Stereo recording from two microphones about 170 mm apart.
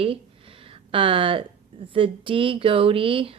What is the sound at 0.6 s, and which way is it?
Speech, 30° right (ahead or behind).